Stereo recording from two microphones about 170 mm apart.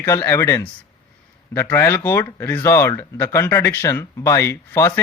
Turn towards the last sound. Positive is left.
turn(degrees=15)  # may be behind; listen again after turning